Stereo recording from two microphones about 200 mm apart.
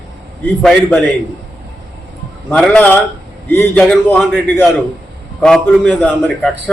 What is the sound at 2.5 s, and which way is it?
A man's voice, 5° left (ahead or behind).